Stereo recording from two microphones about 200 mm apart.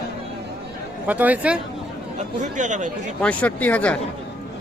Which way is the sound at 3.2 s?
5° left (ahead or behind).